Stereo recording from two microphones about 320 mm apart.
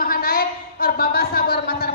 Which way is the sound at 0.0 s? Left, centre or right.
Left.